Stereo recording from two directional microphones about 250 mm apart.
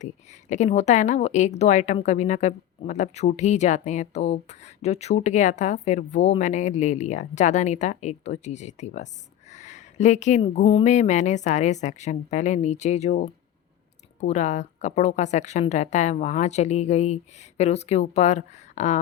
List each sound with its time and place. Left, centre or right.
0.5 s a woman's voice: left